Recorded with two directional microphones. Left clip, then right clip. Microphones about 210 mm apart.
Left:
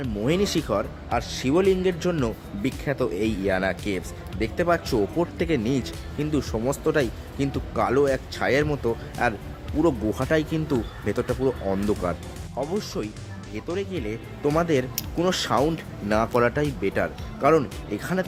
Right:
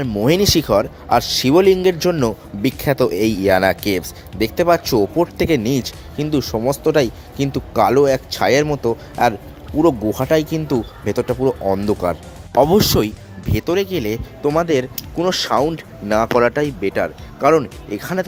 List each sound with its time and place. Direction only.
0.0 s speech: 25° right (ahead or behind)
12.5 s speech: 40° right (ahead or behind)